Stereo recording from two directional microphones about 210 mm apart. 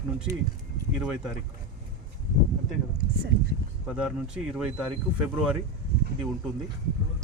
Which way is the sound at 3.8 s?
5° right (ahead or behind).